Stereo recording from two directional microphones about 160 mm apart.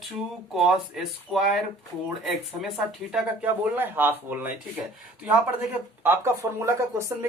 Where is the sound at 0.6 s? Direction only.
5° right (ahead or behind).